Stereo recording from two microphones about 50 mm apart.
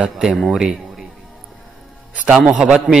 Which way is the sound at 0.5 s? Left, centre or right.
Centre.